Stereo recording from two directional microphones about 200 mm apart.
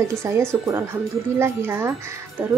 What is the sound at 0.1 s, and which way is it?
A woman's voice, 15° right (ahead or behind).